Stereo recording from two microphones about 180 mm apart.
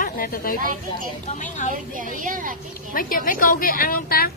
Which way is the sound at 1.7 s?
50° right (ahead or behind).